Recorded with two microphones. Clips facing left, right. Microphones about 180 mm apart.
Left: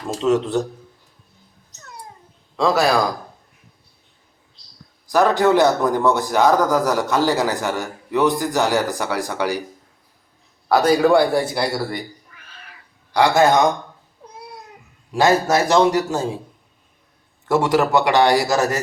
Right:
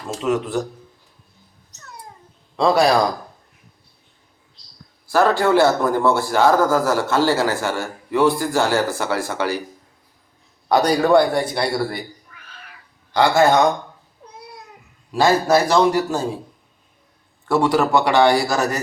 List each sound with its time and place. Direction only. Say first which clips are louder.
0.2 s a man's voice: left 3 dB; 25° left (ahead or behind)
2.6 s speech: right 2 dB; centre (ahead or behind)
5.1 s a man's voice: left 1 dB; 15° left (ahead or behind)
10.7 s speech: left 1 dB; 5° left (ahead or behind)
13.1 s a man's voice: even; 15° left (ahead or behind)
15.1 s a man's voice: right 1 dB; 20° left (ahead or behind)
17.5 s a man's voice: even; 20° left (ahead or behind)